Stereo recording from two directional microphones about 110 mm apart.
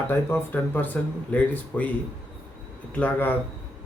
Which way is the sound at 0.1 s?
20° left (ahead or behind).